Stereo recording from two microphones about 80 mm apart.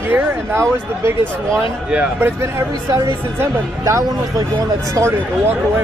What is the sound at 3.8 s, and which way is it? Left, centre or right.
Speech, right.